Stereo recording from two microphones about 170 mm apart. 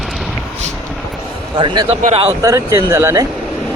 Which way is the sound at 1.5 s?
25° right (ahead or behind).